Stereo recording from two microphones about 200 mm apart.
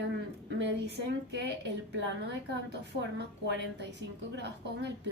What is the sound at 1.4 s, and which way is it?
Speech, 60° right (ahead or behind).